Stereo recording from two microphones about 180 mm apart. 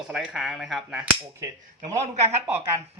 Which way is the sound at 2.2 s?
35° right (ahead or behind).